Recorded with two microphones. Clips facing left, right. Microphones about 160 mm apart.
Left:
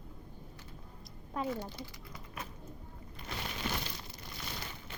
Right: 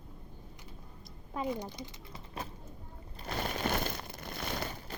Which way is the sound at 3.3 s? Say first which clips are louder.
Right 5 dB; 45° right (ahead or behind).